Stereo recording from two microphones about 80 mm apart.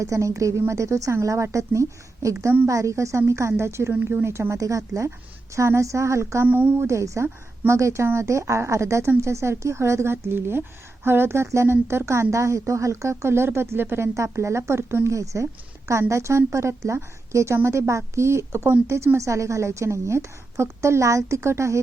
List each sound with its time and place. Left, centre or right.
0.0 s a woman's voice: right
3.9 s a woman's voice: right
6.5 s speech: right
6.8 s a woman's voice: right